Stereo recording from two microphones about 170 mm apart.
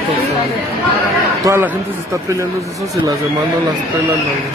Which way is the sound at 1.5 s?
20° right (ahead or behind).